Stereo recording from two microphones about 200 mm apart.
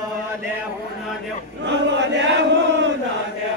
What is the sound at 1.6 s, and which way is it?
Chant, 65° right (ahead or behind).